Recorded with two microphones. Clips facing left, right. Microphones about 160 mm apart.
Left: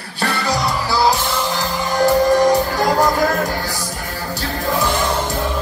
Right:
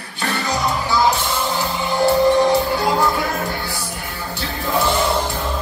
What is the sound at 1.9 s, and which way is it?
Music, 40° left (ahead or behind).